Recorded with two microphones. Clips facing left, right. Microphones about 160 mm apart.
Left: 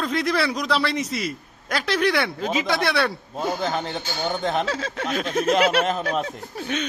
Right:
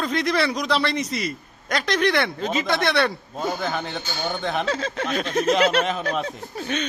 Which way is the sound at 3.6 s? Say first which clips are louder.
Left 1 dB; 30° left (ahead or behind).